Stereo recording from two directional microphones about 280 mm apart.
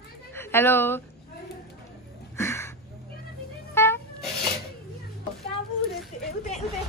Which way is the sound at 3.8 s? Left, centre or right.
Centre.